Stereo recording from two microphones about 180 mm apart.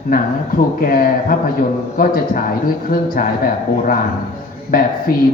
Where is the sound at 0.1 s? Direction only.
55° left (ahead or behind).